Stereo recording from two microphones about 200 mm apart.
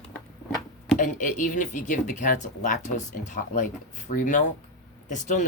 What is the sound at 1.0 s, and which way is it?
Speech, 40° left (ahead or behind).